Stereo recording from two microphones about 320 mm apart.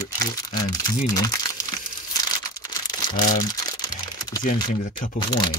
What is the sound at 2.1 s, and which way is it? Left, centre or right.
Crumpling, centre.